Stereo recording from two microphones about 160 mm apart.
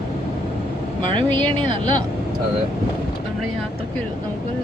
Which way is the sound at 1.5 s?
30° right (ahead or behind).